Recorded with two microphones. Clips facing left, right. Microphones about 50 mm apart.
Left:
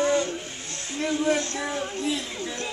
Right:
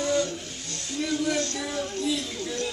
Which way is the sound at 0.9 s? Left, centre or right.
Left.